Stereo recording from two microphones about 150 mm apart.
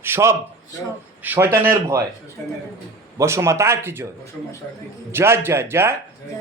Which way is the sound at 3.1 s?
20° right (ahead or behind).